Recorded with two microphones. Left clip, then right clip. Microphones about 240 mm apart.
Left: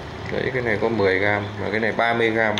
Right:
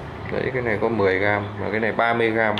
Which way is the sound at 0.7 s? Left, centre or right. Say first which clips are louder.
Even; right.